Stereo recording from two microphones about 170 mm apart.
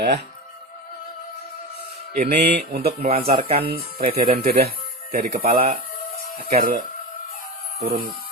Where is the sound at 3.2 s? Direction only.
35° right (ahead or behind).